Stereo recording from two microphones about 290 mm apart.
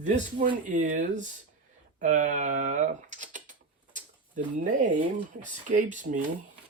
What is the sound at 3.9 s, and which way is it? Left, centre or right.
Bird, right.